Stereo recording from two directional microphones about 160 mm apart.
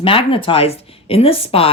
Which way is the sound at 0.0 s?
35° left (ahead or behind).